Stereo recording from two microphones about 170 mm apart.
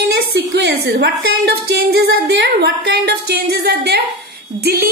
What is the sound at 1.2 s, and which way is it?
A woman's voice, 70° right (ahead or behind).